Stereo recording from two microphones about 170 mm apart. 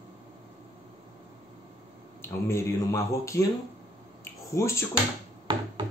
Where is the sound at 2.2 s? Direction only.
15° left (ahead or behind).